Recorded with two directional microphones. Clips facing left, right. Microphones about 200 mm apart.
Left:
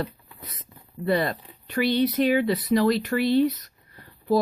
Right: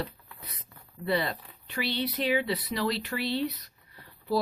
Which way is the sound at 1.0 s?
50° left (ahead or behind).